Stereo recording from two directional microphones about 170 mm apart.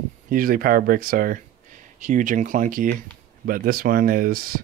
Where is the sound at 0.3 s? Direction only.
55° right (ahead or behind).